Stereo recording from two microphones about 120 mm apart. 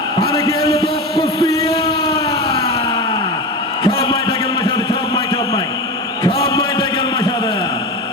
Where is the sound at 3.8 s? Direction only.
45° left (ahead or behind).